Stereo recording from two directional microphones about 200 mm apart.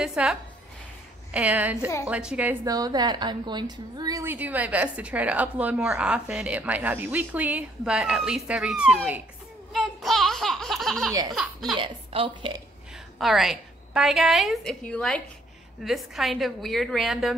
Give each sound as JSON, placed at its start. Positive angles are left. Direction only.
{"t": 0.0, "sound": "a woman's voice", "side_deg": -5}
{"t": 2.6, "sound": "a woman's voice", "side_deg": -20}
{"t": 9.7, "sound": "a sound", "side_deg": 0}
{"t": 11.7, "sound": "a woman's voice", "side_deg": -25}
{"t": 13.2, "sound": "a woman's voice", "side_deg": 0}